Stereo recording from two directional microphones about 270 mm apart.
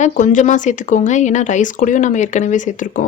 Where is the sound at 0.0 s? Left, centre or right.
Left.